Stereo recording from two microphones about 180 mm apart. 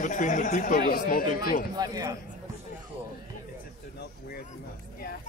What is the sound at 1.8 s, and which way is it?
Speech, 20° right (ahead or behind).